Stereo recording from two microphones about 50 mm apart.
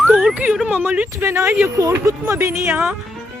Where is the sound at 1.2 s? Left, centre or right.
Right.